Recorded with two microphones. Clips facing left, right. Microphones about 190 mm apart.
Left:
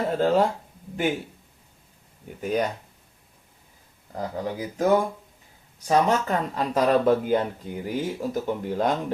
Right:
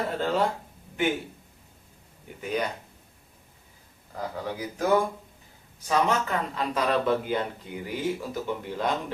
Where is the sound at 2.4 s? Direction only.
40° left (ahead or behind).